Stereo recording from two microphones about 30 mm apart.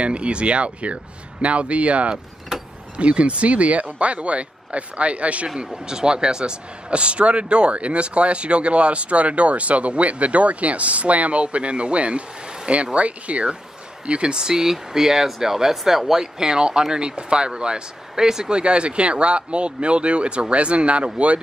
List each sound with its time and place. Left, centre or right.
0.0 s speech: right
5.9 s speech: right
14.4 s speech: centre
18.1 s speech: right
18.5 s speech: right